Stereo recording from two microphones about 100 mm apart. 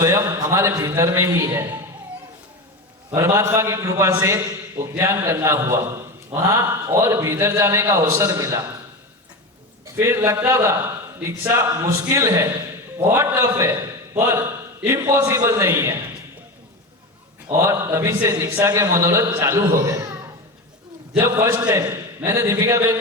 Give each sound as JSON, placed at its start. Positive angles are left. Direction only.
{"t": 0.0, "sound": "a man's voice", "side_deg": -35}
{"t": 3.2, "sound": "a man's voice", "side_deg": -30}
{"t": 9.8, "sound": "a man's voice", "side_deg": -25}
{"t": 17.5, "sound": "a man's voice", "side_deg": -25}
{"t": 21.2, "sound": "a man's voice", "side_deg": -25}